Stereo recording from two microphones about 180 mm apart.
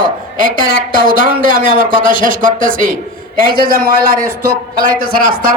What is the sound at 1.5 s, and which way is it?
A man's voice, 50° right (ahead or behind).